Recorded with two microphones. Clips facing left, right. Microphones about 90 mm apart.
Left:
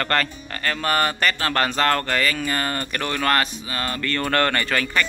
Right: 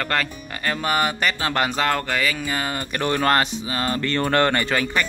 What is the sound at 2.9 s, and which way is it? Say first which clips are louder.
Speech: right 3 dB; 25° right (ahead or behind).